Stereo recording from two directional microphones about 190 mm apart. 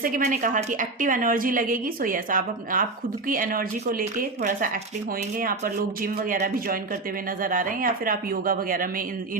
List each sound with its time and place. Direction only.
0.0 s a woman's voice: 45° right (ahead or behind)